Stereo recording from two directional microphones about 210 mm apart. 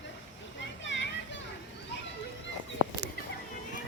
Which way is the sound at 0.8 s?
60° left (ahead or behind).